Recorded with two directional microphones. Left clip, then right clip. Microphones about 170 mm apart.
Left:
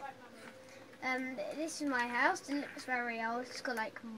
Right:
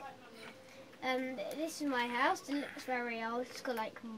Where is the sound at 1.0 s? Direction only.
10° right (ahead or behind).